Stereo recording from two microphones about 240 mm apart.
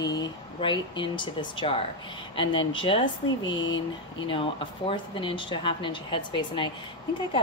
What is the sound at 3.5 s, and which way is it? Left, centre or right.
Speech, left.